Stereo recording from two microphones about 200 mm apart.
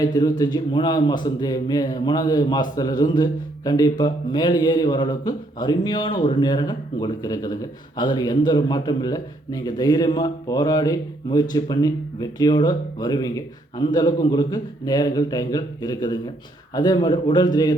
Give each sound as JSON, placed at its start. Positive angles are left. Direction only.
{"t": 0.0, "sound": "speech", "side_deg": 20}